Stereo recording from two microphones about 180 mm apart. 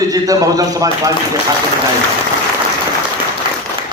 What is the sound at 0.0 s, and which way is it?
A man's voice, 20° right (ahead or behind).